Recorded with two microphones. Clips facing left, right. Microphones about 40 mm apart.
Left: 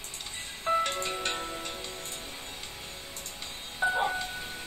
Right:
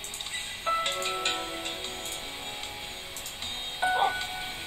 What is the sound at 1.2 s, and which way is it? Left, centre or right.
Music, right.